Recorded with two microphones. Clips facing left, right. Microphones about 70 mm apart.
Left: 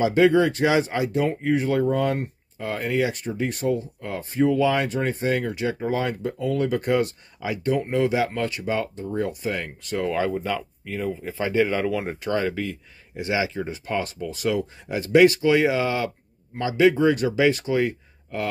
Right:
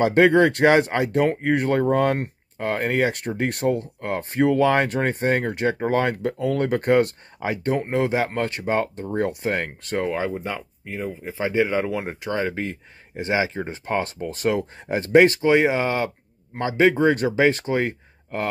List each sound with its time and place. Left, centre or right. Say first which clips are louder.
0.0 s speech: right 2 dB; right
3.2 s speech: right 2 dB; right
10.0 s speech: left 5 dB; right